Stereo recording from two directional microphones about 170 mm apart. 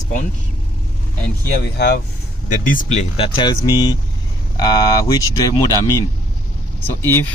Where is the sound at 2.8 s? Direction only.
40° left (ahead or behind); by 7.3 s 15° left (ahead or behind).